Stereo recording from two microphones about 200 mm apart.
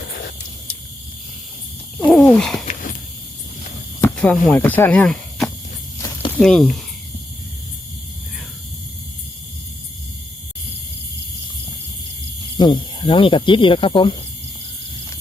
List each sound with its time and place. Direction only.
2.0 s a sound: 10° left (ahead or behind)
4.0 s speech: 5° left (ahead or behind)
12.5 s speech: 20° left (ahead or behind)